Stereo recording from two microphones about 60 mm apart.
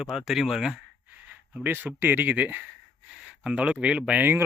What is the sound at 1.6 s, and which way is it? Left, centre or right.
Speech, right.